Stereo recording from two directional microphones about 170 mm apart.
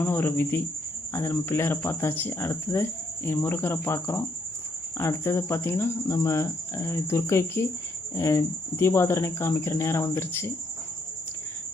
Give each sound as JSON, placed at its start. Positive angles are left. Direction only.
{"t": 0.0, "sound": "cricket", "side_deg": 10}